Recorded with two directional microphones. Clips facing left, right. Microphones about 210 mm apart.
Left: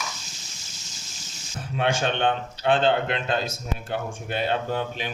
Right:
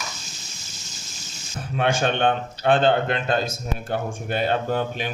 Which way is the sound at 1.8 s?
50° right (ahead or behind).